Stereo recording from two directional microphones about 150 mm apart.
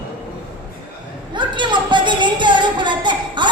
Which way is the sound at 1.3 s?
30° right (ahead or behind).